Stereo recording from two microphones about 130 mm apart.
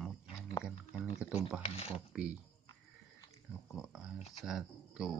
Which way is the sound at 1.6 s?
50° left (ahead or behind).